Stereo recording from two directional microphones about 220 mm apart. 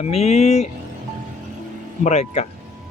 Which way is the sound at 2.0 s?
30° left (ahead or behind).